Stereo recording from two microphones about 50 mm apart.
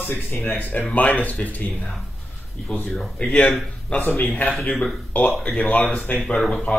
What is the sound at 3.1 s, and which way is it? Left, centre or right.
Speech, left.